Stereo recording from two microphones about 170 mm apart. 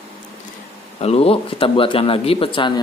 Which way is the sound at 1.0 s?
35° left (ahead or behind).